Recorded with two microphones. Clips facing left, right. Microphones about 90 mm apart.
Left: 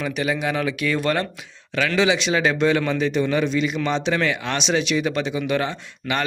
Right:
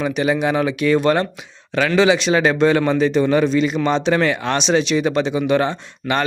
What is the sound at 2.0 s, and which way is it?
A man's voice, 40° right (ahead or behind).